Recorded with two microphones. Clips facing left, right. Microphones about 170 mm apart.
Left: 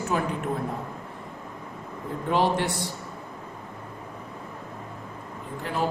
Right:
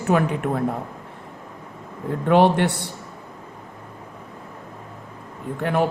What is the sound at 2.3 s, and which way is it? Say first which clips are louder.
Speech: right 7 dB; 65° right (ahead or behind).